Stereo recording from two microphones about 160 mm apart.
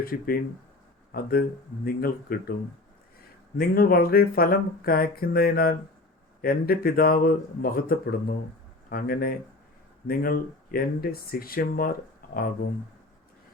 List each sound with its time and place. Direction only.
0.0 s speech: 65° left (ahead or behind)
3.6 s speech: 65° left (ahead or behind)